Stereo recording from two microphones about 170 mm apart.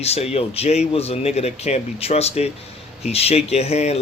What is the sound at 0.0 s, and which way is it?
Speech, 40° left (ahead or behind).